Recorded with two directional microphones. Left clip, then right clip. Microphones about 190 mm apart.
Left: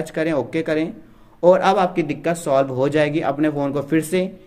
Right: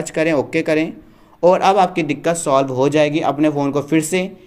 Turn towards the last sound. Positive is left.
turn(degrees=-20)  # may be behind; listen again after turning